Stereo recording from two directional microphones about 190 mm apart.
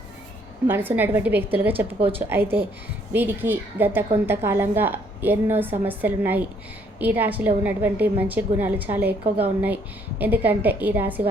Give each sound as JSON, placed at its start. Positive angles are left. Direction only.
{"t": 0.7, "sound": "a woman's voice", "side_deg": -10}
{"t": 2.0, "sound": "a woman's voice", "side_deg": -30}
{"t": 2.3, "sound": "a woman's voice", "side_deg": -10}